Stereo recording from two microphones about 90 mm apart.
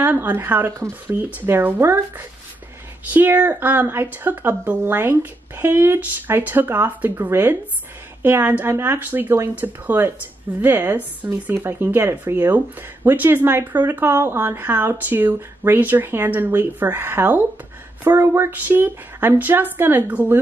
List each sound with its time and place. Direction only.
0.0 s speech: 20° right (ahead or behind)